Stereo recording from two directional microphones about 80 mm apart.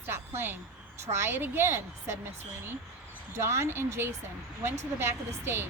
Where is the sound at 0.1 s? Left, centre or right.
Right.